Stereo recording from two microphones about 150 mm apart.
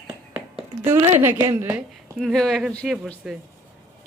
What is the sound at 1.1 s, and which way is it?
Speech, 15° right (ahead or behind).